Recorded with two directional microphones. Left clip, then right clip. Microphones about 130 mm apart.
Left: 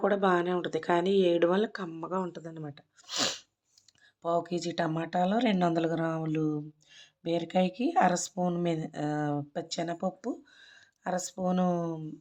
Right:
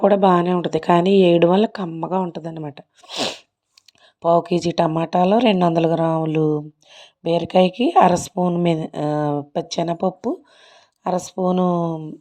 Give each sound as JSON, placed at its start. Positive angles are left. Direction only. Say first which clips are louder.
{"t": 0.0, "sound": "a woman's voice", "louder": "right 11 dB", "side_deg": -45}
{"t": 3.1, "sound": "sneeze", "louder": "right 6 dB", "side_deg": -35}
{"t": 4.2, "sound": "a woman's voice", "louder": "right 13 dB", "side_deg": -55}
{"t": 8.6, "sound": "a woman's voice", "louder": "right 11 dB", "side_deg": -50}